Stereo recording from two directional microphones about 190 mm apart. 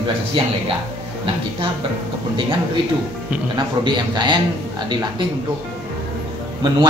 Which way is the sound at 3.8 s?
25° right (ahead or behind).